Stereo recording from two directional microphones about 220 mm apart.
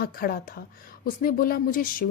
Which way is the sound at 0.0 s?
40° left (ahead or behind).